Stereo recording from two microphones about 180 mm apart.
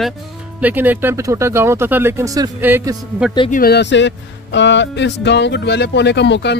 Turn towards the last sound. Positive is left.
turn(degrees=75)  # may be behind; listen again after turning